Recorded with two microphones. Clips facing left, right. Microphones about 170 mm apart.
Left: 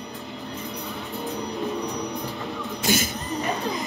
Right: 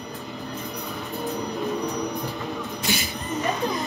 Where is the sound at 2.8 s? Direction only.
45° left (ahead or behind).